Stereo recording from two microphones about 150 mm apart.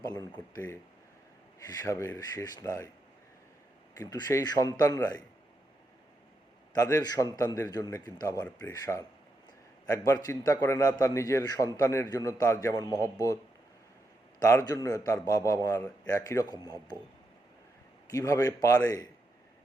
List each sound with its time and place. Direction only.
0.0 s a man's voice: 25° left (ahead or behind)
3.9 s a man's voice: 20° left (ahead or behind)
6.7 s a man's voice: 20° left (ahead or behind)
14.4 s a man's voice: 20° left (ahead or behind)
18.1 s a man's voice: 20° left (ahead or behind)